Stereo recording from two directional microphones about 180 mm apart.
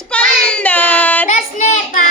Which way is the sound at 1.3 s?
40° left (ahead or behind).